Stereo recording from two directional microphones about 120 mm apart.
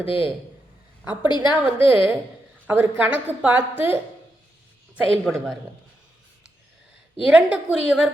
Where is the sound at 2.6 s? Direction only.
15° right (ahead or behind).